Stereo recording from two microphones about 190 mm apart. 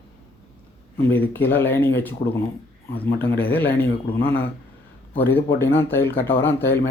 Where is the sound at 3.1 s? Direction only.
55° left (ahead or behind).